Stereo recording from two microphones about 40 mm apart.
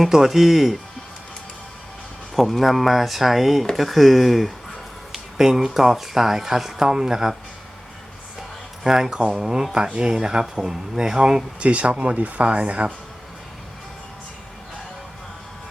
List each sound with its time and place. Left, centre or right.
0.1 s speech: centre
2.3 s speech: centre
5.4 s speech: centre
8.4 s a sound: centre
9.4 s speech: centre
11.6 s speech: right